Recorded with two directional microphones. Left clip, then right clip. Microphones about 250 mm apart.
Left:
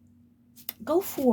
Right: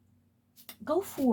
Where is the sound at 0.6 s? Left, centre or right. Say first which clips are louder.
Left 4 dB; left.